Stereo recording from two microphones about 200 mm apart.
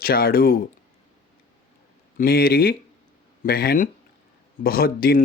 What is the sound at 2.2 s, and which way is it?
Speech, 50° left (ahead or behind).